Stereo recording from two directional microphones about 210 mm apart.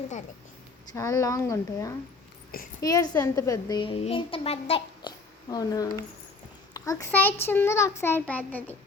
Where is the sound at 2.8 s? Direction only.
20° left (ahead or behind).